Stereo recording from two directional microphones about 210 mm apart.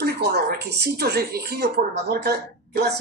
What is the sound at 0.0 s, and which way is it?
Speech, 50° right (ahead or behind).